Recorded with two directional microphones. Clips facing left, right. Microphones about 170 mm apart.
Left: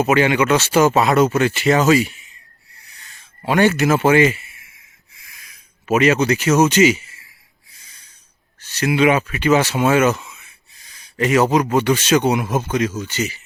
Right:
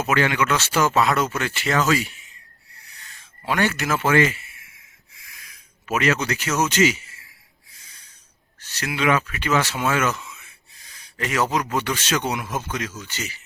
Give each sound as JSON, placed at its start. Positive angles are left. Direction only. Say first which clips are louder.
{"t": 0.0, "sound": "speech", "louder": "left 6 dB", "side_deg": 20}
{"t": 3.4, "sound": "speech", "louder": "left 8 dB", "side_deg": 20}
{"t": 5.8, "sound": "speech", "louder": "left 7 dB", "side_deg": 20}
{"t": 8.6, "sound": "speech", "louder": "left 7 dB", "side_deg": 20}